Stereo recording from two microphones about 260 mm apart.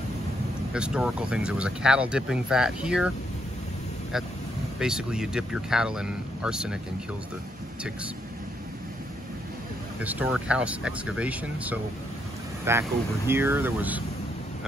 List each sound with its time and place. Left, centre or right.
0.7 s speech: centre
4.7 s speech: centre
9.9 s speech: centre